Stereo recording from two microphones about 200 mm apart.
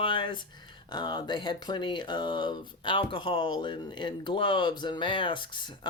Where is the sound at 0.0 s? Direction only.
25° left (ahead or behind).